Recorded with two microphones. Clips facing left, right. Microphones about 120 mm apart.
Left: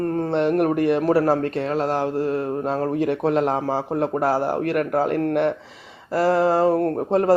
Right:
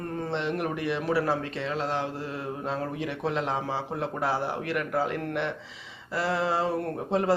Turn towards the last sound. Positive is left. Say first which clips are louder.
# left 7 dB
turn(degrees=45)  # may be behind; listen again after turning